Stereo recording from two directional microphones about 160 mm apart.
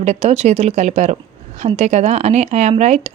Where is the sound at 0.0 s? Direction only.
45° right (ahead or behind).